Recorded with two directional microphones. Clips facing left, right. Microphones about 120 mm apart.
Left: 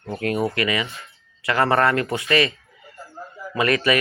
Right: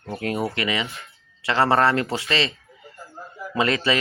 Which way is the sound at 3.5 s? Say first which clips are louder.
Left 2 dB; 20° right (ahead or behind).